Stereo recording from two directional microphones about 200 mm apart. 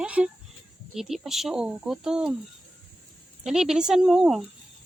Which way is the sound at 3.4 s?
Centre (ahead or behind).